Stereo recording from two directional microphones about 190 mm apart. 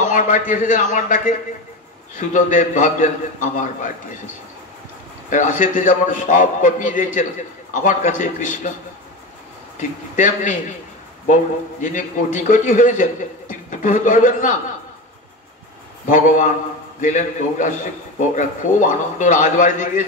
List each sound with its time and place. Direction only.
0.0 s a man's voice: 45° left (ahead or behind)
5.3 s a man's voice: 45° left (ahead or behind)
9.8 s a man's voice: 40° left (ahead or behind)
11.8 s a man's voice: 40° left (ahead or behind)
16.1 s a man's voice: 45° left (ahead or behind)